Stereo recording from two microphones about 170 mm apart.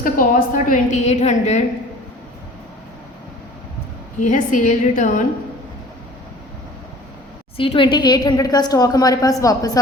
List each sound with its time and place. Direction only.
0.0 s a woman's voice: 55° left (ahead or behind)
4.3 s a woman's voice: 50° left (ahead or behind)
7.5 s a woman's voice: 30° left (ahead or behind)